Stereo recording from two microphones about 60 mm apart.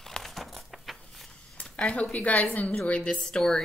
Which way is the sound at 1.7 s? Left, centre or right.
Left.